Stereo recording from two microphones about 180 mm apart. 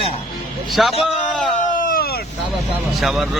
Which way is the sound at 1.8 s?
50° left (ahead or behind).